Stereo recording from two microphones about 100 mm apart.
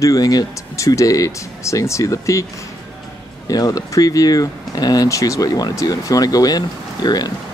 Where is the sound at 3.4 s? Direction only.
40° left (ahead or behind).